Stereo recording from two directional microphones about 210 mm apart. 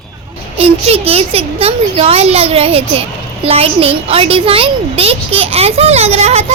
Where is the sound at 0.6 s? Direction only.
30° right (ahead or behind).